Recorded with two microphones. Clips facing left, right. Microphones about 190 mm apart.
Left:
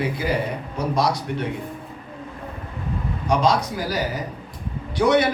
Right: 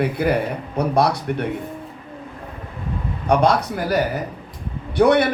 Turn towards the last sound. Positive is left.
turn(degrees=-60)  # may be behind; listen again after turning